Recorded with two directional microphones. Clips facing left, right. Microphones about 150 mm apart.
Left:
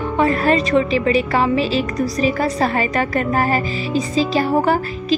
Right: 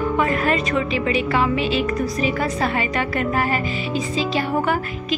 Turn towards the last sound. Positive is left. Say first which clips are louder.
# left 4 dB
turn(degrees=35)  # may be behind; listen again after turning